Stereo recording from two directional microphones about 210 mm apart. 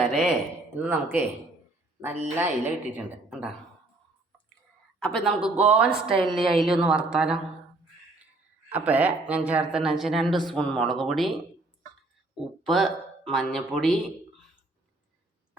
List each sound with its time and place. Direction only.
0.0 s a sound: centre (ahead or behind)
0.8 s a woman's voice: 10° right (ahead or behind)
4.9 s speech: 5° left (ahead or behind)
5.9 s a woman's voice: 25° right (ahead or behind)
6.2 s speech: centre (ahead or behind)
8.7 s speech: 5° right (ahead or behind)